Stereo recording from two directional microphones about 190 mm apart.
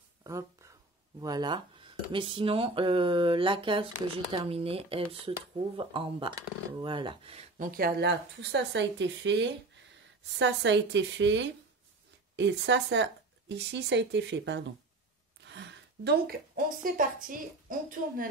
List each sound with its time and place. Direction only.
0.2 s a sound: 15° right (ahead or behind)
1.2 s speech: 20° right (ahead or behind)
7.5 s a woman's voice: 50° right (ahead or behind)